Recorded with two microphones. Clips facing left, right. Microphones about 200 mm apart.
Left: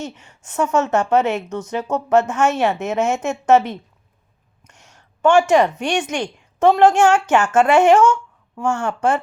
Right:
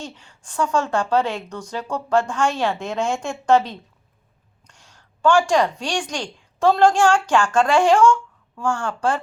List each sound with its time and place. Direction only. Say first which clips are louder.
0.0 s a woman's voice: left 5 dB; 20° left (ahead or behind)